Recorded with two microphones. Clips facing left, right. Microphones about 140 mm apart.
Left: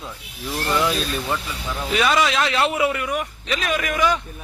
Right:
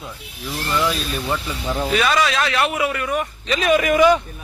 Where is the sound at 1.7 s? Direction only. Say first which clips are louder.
Right 6 dB; 30° right (ahead or behind).